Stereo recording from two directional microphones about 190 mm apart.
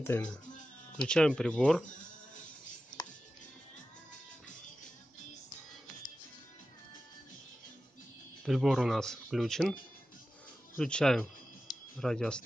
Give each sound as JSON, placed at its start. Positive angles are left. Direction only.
{"t": 0.0, "sound": "speech", "side_deg": 10}
{"t": 3.0, "sound": "music", "side_deg": 20}
{"t": 8.5, "sound": "speech", "side_deg": 0}
{"t": 10.8, "sound": "speech", "side_deg": 5}